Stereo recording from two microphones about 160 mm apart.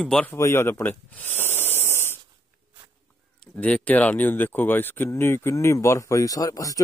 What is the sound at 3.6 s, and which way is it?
Speech, 10° left (ahead or behind).